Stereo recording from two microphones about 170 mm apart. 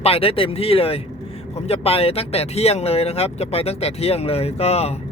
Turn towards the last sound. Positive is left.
turn(degrees=35)  # may be behind; listen again after turning